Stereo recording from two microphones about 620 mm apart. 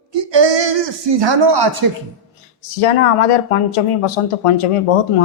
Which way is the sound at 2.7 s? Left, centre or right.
Left.